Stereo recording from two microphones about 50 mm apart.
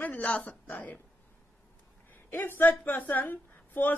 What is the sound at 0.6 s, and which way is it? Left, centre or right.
Speech, left.